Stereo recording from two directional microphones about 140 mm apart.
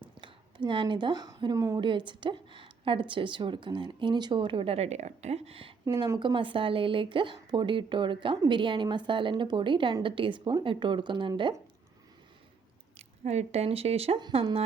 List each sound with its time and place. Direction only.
0.0 s speech: 35° right (ahead or behind)
1.8 s a woman's voice: 35° right (ahead or behind)
5.8 s a woman's voice: 25° right (ahead or behind)
13.0 s a woman's voice: 50° right (ahead or behind)